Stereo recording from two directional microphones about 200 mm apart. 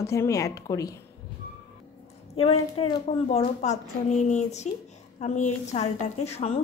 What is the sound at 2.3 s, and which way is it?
A woman's voice, 30° left (ahead or behind).